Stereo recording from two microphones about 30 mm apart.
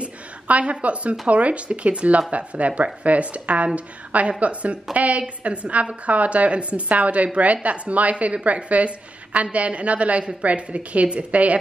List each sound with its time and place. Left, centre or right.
0.5 s a woman's voice: right